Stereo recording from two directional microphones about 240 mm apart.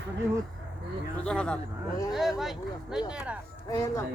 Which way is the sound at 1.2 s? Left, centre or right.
Centre.